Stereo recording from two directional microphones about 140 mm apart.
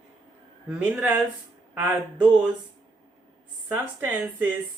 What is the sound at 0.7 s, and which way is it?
Speech, 10° right (ahead or behind).